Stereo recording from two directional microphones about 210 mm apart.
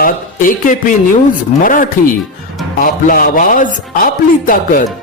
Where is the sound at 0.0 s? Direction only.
40° left (ahead or behind).